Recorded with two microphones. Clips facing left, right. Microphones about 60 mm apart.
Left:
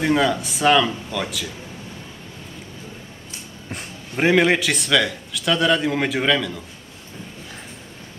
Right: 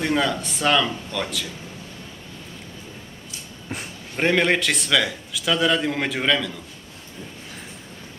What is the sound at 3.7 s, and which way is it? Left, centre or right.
A man's voice, centre.